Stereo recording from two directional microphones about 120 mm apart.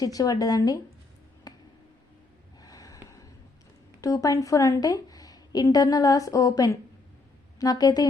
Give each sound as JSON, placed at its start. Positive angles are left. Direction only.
{"t": 0.0, "sound": "speech", "side_deg": 30}
{"t": 1.5, "sound": "a sound", "side_deg": 30}
{"t": 4.0, "sound": "a woman's voice", "side_deg": 30}